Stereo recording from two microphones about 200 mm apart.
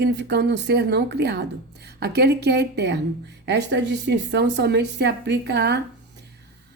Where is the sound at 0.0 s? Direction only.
60° right (ahead or behind).